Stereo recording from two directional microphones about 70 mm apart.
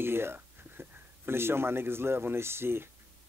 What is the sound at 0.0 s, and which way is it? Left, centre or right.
Speech, right.